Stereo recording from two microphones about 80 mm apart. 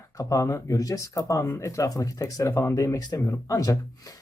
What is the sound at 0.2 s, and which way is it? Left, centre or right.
Speech, left.